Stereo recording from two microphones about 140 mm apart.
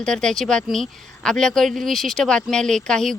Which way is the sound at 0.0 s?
5° left (ahead or behind).